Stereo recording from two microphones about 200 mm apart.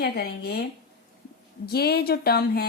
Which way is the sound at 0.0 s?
50° left (ahead or behind).